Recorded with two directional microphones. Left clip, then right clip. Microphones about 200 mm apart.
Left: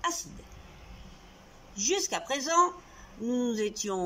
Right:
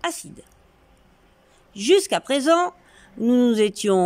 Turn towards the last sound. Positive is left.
turn(degrees=-60)  # may be behind; listen again after turning